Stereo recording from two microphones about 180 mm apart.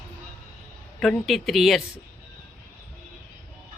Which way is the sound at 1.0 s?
Centre (ahead or behind).